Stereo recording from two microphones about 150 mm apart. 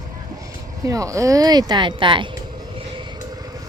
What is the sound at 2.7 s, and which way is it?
Vehicle, 30° right (ahead or behind).